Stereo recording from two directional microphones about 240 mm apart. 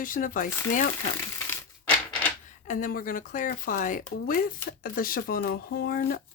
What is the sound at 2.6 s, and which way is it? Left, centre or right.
Speech, left.